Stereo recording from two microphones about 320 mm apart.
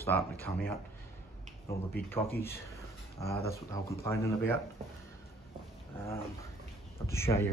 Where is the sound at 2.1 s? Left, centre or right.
Centre.